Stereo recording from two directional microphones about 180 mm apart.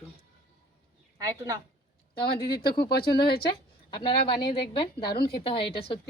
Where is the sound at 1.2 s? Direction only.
20° right (ahead or behind).